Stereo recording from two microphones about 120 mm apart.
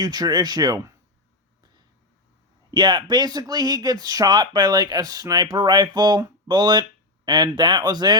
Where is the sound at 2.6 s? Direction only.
40° right (ahead or behind).